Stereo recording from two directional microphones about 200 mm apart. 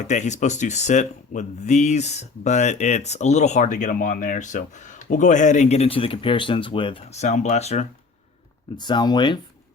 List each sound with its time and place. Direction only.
0.0 s speech: 35° left (ahead or behind)
8.7 s speech: 20° left (ahead or behind)